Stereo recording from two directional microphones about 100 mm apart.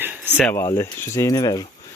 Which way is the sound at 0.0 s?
20° right (ahead or behind).